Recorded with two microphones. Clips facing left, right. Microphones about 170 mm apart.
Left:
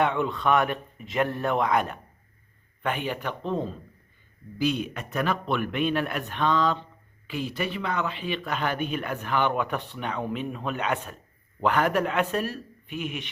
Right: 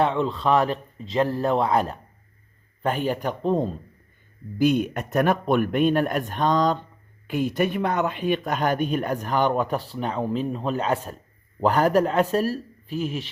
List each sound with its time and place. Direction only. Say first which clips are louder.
0.0 s a man's voice: right 2 dB; 30° right (ahead or behind)